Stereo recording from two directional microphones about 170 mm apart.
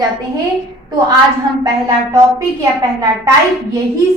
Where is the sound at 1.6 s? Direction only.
20° right (ahead or behind).